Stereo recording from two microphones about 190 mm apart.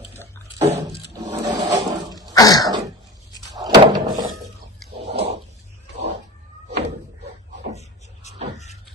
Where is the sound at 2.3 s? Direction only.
20° left (ahead or behind).